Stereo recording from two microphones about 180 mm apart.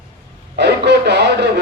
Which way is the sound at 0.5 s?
70° right (ahead or behind).